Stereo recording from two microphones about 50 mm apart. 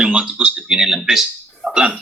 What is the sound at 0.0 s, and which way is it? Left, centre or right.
Speech, centre.